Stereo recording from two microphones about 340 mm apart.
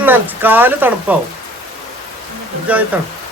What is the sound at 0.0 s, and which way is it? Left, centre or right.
Speech, centre.